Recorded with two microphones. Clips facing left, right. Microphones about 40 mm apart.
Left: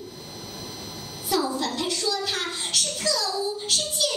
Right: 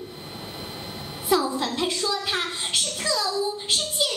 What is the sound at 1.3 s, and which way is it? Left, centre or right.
A child's voice, right.